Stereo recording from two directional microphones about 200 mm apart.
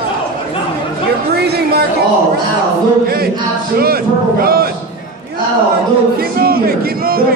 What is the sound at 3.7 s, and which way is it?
Speech, 50° right (ahead or behind).